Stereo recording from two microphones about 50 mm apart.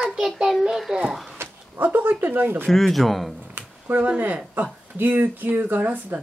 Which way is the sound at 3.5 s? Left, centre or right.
Right.